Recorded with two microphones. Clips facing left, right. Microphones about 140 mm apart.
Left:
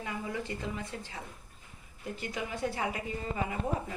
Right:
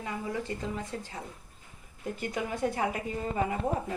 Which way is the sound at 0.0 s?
40° right (ahead or behind).